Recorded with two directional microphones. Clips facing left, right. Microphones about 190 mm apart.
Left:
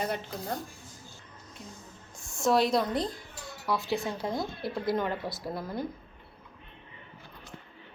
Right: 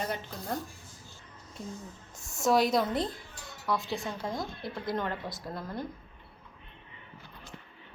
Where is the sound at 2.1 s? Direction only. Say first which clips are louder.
Left 1 dB; 25° right (ahead or behind).